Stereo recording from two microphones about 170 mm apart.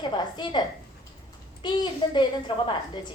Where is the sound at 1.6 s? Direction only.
25° left (ahead or behind).